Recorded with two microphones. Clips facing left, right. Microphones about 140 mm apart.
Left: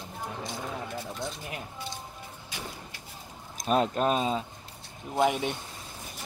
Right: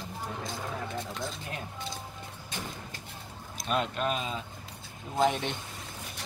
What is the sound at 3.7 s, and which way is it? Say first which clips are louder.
Speech: left 5 dB; 40° left (ahead or behind).